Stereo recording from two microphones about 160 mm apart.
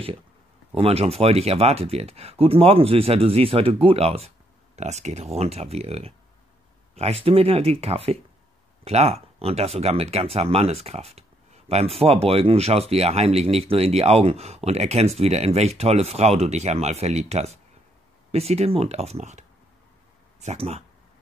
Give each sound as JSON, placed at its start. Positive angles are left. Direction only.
{"t": 0.7, "sound": "speech", "side_deg": -40}